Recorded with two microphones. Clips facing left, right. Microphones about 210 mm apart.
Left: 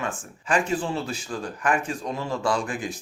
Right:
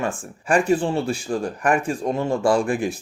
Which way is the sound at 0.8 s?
30° right (ahead or behind).